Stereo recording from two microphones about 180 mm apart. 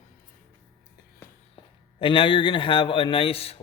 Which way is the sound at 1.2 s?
10° left (ahead or behind).